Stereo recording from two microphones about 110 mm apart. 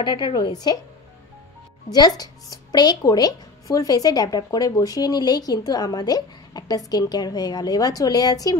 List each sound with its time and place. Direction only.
0.0 s a woman's voice: 40° left (ahead or behind)
1.9 s a woman's voice: 35° left (ahead or behind)